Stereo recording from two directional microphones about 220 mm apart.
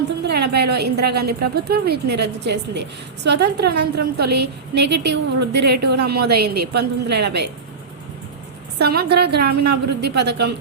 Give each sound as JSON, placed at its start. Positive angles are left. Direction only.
{"t": 0.2, "sound": "a woman's voice", "side_deg": -50}
{"t": 8.8, "sound": "a woman's voice", "side_deg": -45}